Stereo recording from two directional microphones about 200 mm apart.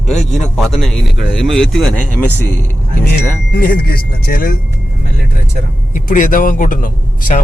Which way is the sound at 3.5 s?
50° left (ahead or behind).